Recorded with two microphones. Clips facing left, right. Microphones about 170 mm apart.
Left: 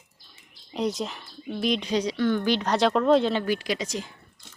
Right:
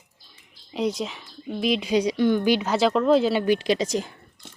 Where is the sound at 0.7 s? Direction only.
Centre (ahead or behind).